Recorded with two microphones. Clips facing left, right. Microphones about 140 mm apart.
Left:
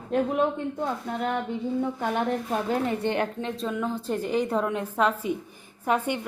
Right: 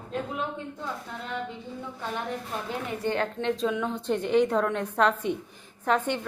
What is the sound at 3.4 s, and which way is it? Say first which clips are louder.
A woman's voice: right 2 dB; 5° left (ahead or behind).